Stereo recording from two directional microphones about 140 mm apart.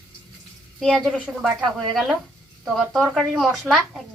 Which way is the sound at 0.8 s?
Centre (ahead or behind).